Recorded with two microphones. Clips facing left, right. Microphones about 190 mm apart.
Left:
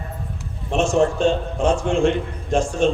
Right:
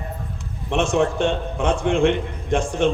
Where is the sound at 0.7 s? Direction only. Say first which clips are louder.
Left 1 dB; 60° right (ahead or behind).